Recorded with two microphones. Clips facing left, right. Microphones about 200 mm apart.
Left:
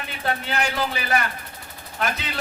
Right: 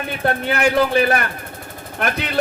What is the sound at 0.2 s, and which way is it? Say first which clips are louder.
A man's voice: right 6 dB; 60° right (ahead or behind).